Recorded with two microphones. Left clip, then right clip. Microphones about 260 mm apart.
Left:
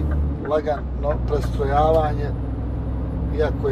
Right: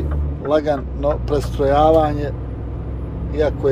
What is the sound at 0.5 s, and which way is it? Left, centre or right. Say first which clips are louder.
Speech: right 5 dB; right.